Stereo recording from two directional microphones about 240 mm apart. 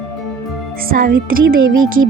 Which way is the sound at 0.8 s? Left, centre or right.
Right.